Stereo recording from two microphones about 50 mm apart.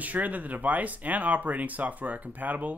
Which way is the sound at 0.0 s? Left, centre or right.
Right.